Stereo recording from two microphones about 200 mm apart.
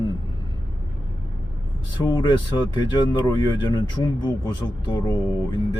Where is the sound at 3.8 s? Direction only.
20° left (ahead or behind).